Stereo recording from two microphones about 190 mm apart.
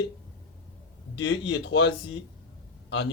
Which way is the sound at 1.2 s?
70° left (ahead or behind).